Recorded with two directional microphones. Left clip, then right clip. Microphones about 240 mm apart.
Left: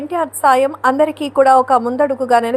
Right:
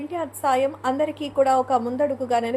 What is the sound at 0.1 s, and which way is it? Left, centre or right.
A woman's voice, left.